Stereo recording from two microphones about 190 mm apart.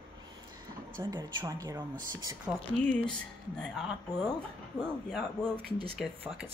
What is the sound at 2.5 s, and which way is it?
Speech, 5° right (ahead or behind).